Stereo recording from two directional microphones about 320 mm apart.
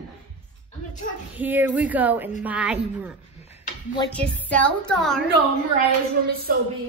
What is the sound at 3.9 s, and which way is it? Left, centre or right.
A woman's voice, centre.